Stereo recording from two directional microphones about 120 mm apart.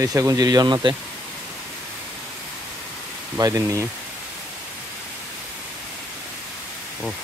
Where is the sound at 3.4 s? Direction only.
30° right (ahead or behind).